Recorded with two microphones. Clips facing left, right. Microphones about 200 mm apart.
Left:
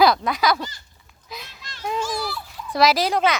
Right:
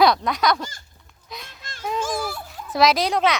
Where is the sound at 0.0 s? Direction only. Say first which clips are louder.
Even; centre (ahead or behind).